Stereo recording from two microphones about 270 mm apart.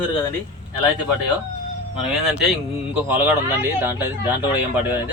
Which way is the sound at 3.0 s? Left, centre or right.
Centre.